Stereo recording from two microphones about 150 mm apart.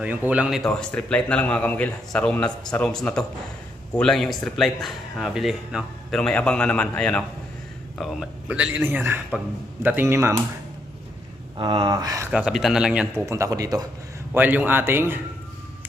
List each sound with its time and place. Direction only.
0.0 s a man's voice: 10° right (ahead or behind)
11.5 s speech: 30° right (ahead or behind)
12.3 s a man's voice: 5° right (ahead or behind)
13.2 s speech: 20° right (ahead or behind)
14.3 s a man's voice: 10° right (ahead or behind)